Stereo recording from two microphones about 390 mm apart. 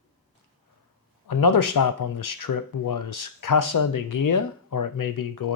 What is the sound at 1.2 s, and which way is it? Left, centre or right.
Speech, left.